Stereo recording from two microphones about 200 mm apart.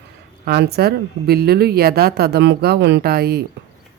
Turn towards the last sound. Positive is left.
turn(degrees=-50)  # may be behind; listen again after turning